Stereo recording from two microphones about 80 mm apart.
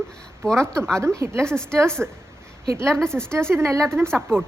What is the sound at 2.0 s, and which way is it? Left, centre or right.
Speech, centre.